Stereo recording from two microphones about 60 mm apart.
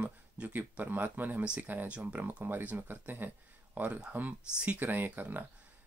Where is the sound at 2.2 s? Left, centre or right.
Right.